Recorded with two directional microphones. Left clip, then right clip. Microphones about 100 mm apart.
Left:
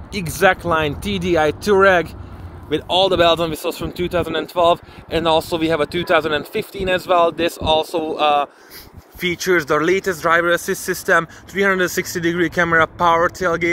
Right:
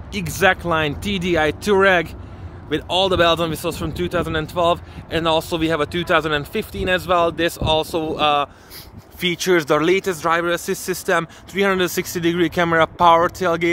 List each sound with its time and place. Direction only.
0.1 s speech: 5° right (ahead or behind)
7.2 s speech: 40° right (ahead or behind)
9.2 s speech: 80° right
9.8 s speech: 50° right (ahead or behind)
10.3 s speech: 25° right (ahead or behind)
11.5 s speech: 55° right (ahead or behind)